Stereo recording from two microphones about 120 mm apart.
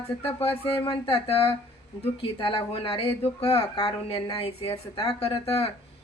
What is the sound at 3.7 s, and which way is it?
Speech, 40° left (ahead or behind).